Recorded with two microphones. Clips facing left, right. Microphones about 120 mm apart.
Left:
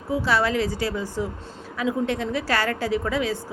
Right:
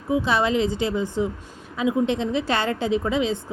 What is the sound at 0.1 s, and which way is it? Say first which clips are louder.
A woman's voice: right 1 dB; 20° right (ahead or behind).